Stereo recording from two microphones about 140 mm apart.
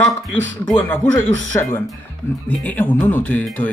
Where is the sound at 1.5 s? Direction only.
15° left (ahead or behind).